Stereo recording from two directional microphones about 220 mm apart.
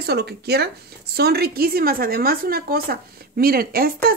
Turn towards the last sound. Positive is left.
turn(degrees=-45)  # may be behind; listen again after turning